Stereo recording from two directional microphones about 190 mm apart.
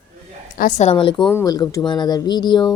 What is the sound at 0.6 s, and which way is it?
Speech, 35° left (ahead or behind).